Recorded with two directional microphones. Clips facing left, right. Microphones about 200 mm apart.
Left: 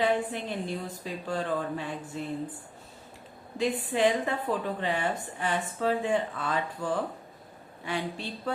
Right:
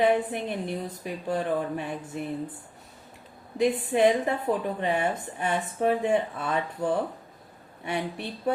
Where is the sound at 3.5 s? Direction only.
20° right (ahead or behind).